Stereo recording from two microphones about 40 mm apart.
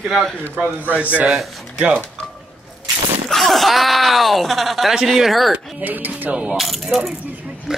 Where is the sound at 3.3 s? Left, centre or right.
Centre.